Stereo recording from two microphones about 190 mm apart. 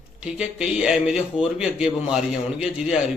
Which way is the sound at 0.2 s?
5° right (ahead or behind).